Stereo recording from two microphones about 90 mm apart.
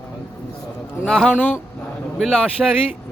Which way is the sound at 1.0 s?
5° left (ahead or behind).